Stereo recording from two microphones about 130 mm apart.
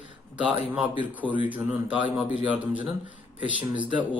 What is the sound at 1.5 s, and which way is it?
A man's voice, 10° right (ahead or behind).